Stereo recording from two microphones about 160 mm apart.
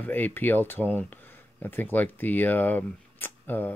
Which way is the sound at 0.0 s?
10° left (ahead or behind).